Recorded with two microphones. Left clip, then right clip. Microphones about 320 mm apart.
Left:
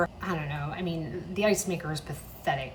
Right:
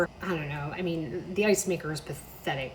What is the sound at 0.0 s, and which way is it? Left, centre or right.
Speech, centre.